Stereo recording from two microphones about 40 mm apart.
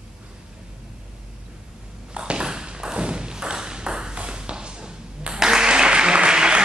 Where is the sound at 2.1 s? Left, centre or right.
Right.